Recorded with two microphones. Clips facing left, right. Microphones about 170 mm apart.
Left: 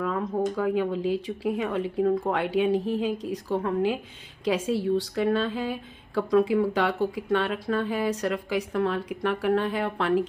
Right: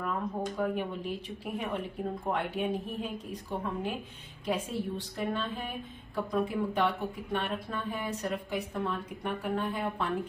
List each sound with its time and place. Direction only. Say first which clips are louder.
0.0 s speech: left 7 dB; 90° left